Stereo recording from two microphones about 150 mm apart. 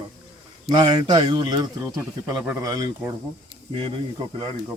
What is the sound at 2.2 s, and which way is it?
Speech, 15° right (ahead or behind).